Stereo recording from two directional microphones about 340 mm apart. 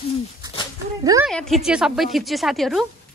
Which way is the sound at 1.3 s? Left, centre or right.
Centre.